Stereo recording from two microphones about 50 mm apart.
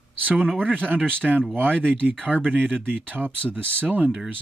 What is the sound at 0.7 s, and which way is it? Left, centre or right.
Speech, right.